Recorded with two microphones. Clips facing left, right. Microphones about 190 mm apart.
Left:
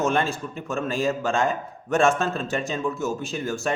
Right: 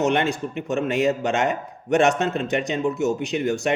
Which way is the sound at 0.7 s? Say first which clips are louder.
Right 4 dB; 20° right (ahead or behind).